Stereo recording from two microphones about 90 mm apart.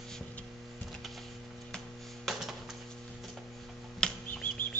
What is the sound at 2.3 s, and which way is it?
Typewriter, centre (ahead or behind).